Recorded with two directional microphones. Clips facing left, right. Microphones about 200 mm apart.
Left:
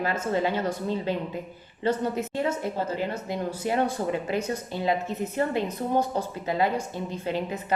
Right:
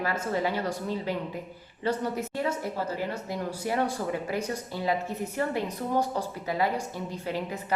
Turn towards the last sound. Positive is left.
turn(degrees=20)  # may be behind; listen again after turning